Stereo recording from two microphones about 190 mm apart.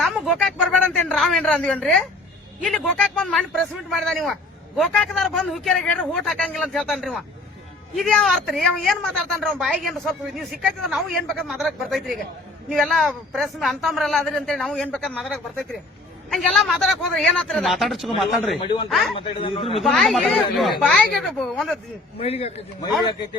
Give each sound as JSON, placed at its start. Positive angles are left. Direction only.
{"t": 0.0, "sound": "a sound", "side_deg": 0}
{"t": 2.6, "sound": "a woman's voice", "side_deg": 5}
{"t": 18.6, "sound": "a man's voice", "side_deg": 25}
{"t": 18.9, "sound": "a woman's voice", "side_deg": 0}
{"t": 19.1, "sound": "a man's voice", "side_deg": 30}
{"t": 19.8, "sound": "a woman's voice", "side_deg": 0}
{"t": 22.2, "sound": "a man's voice", "side_deg": 30}